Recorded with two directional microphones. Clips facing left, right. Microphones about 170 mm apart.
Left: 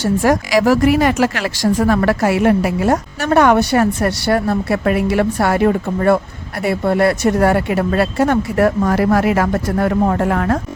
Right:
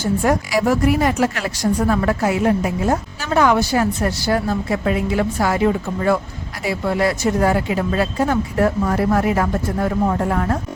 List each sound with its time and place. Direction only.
0.0 s a woman's voice: 85° left